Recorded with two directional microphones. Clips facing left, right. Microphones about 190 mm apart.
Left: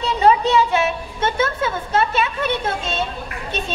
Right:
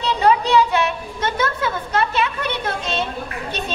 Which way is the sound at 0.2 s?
25° left (ahead or behind).